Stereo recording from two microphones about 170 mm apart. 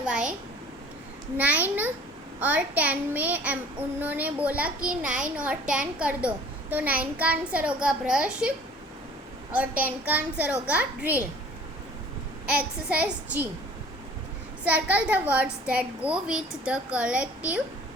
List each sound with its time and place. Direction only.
0.0 s a sound: 5° right (ahead or behind)
1.4 s child singing: 10° right (ahead or behind)
12.5 s child singing: 10° right (ahead or behind)
14.6 s child singing: 10° right (ahead or behind)